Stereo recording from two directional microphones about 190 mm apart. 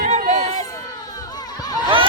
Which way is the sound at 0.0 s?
40° right (ahead or behind).